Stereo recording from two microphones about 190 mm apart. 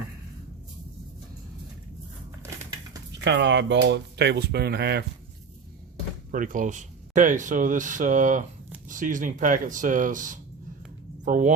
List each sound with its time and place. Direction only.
3.1 s speech: 65° right (ahead or behind)
6.3 s speech: 45° right (ahead or behind)